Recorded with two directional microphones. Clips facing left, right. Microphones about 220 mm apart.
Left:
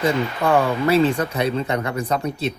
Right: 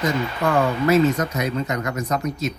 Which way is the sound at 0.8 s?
30° left (ahead or behind).